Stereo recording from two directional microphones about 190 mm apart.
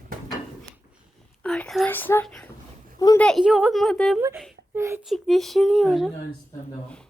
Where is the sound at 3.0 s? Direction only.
20° left (ahead or behind).